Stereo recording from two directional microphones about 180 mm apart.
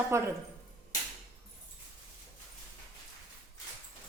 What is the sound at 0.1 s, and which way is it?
Speech, 15° right (ahead or behind).